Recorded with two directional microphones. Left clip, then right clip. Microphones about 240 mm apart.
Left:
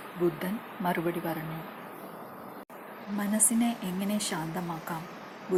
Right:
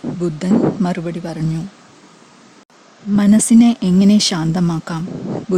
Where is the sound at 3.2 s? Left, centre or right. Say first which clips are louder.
Right 16 dB; right.